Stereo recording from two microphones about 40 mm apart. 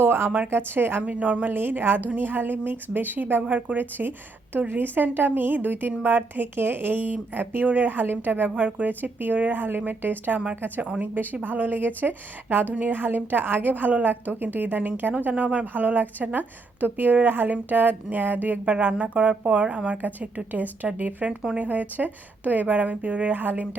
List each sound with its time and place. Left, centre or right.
0.0 s a sound: right
0.4 s speech: right
1.0 s speech: right
3.4 s speech: right
15.6 s speech: right
20.0 s speech: right
21.2 s speech: right
21.6 s speech: right
23.3 s speech: right